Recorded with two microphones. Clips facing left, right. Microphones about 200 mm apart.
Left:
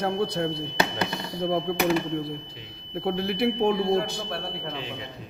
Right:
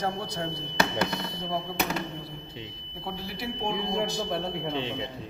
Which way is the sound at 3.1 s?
65° left (ahead or behind).